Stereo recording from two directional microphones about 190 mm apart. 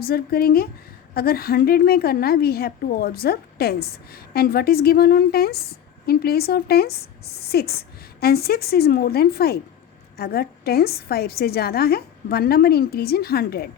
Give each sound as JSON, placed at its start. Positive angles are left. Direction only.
{"t": 0.0, "sound": "a woman's voice", "side_deg": 55}